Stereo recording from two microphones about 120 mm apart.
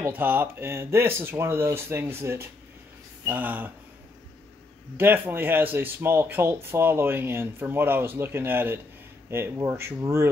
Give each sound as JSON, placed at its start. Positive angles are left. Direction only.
{"t": 0.1, "sound": "speech", "side_deg": -15}
{"t": 4.9, "sound": "speech", "side_deg": -15}